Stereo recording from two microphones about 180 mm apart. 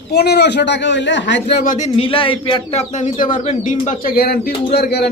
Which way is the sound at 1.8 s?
30° left (ahead or behind).